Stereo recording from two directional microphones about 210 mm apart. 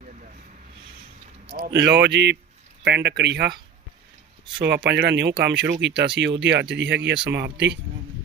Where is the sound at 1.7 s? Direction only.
55° right (ahead or behind).